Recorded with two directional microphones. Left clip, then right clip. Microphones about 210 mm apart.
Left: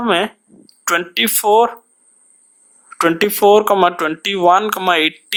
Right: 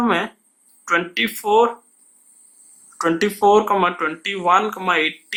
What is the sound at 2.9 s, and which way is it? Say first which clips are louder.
Speech: left 5 dB; 35° left (ahead or behind).